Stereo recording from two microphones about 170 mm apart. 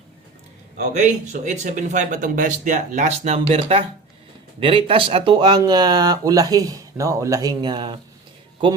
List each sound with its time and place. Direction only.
0.9 s speech: 45° right (ahead or behind); by 7.9 s 25° right (ahead or behind)